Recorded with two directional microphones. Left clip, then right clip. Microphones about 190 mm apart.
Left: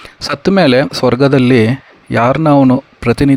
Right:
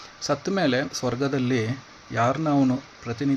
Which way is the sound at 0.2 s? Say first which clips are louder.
Left 13 dB; 50° left (ahead or behind).